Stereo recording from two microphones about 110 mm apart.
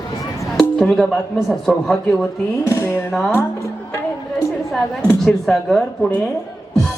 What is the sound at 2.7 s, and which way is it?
Speech, 25° left (ahead or behind).